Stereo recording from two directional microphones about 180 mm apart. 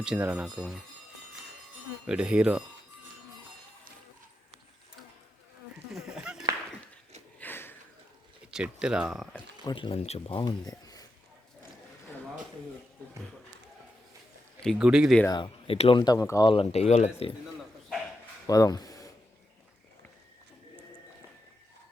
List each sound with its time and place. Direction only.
0.0 s speech: 5° right (ahead or behind)
2.0 s speech: 5° right (ahead or behind)
5.9 s a sound: 5° right (ahead or behind)
7.3 s sniff: 10° left (ahead or behind)
8.4 s speech: 5° right (ahead or behind)
9.6 s speech: 30° left (ahead or behind)
14.6 s speech: centre (ahead or behind)
15.3 s speech: 30° left (ahead or behind)
18.4 s speech: 20° left (ahead or behind)